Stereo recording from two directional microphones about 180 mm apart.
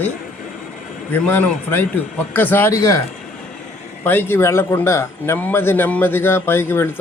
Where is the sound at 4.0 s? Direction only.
10° left (ahead or behind).